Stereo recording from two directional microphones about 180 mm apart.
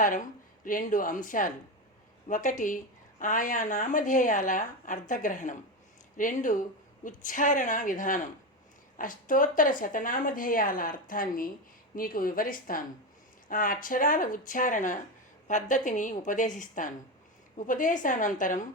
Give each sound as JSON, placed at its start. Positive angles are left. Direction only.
{"t": 0.0, "sound": "a woman's voice", "side_deg": 45}